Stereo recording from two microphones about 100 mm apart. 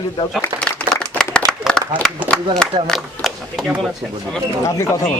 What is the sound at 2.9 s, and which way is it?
Speech, centre (ahead or behind).